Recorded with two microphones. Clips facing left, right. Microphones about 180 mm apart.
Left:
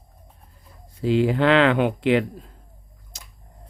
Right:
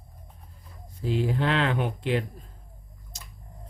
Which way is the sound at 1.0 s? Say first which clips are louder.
Left 7 dB; 90° left.